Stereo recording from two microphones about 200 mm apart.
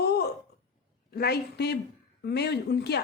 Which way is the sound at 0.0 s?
55° left (ahead or behind).